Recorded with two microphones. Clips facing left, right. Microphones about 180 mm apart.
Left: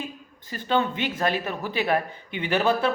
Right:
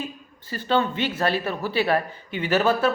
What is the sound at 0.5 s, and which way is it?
A man's voice, 15° left (ahead or behind).